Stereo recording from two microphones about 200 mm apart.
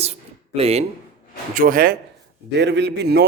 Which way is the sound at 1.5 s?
45° right (ahead or behind).